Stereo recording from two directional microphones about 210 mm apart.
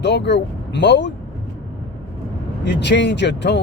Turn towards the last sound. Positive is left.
turn(degrees=55)  # may be behind; listen again after turning